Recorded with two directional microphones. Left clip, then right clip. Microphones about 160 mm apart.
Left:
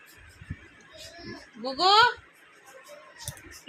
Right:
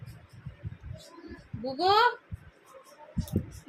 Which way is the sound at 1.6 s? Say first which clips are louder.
Left 4 dB; 15° right (ahead or behind).